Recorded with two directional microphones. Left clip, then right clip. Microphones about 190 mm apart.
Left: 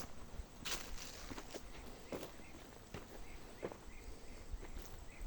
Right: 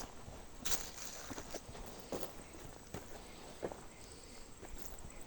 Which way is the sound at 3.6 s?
50° right (ahead or behind).